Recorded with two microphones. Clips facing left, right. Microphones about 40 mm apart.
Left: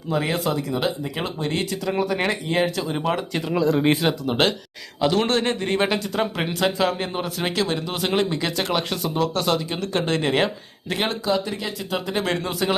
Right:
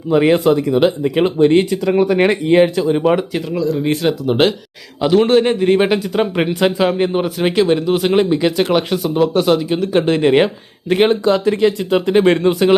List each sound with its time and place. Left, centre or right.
0.1 s speech: right
2.8 s a man's voice: centre
3.6 s speech: left
4.0 s a man's voice: centre; by 11.2 s right
11.3 s speech: right
11.9 s speech: right